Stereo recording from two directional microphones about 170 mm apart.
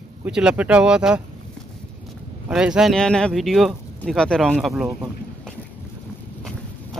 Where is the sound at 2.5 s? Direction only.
5° right (ahead or behind).